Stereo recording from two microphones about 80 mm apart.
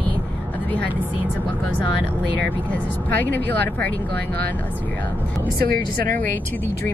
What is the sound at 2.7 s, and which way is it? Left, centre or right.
Speech, left.